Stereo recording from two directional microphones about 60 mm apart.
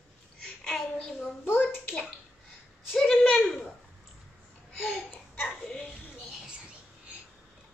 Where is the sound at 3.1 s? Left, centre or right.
Centre.